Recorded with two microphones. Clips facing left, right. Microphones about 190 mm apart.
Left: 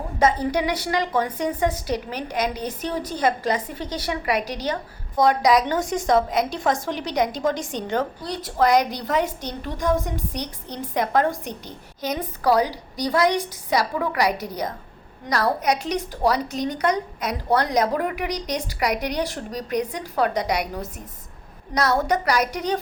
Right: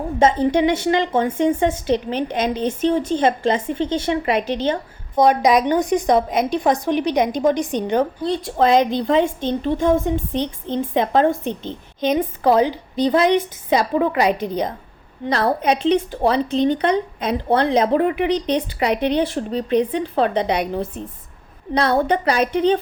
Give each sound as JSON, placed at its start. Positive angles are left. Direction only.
{"t": 0.2, "sound": "a woman's voice", "side_deg": -25}